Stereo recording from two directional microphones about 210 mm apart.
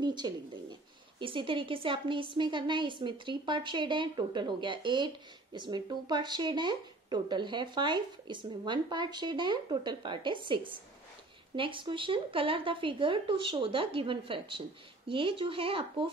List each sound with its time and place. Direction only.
0.0 s a woman's voice: 20° right (ahead or behind)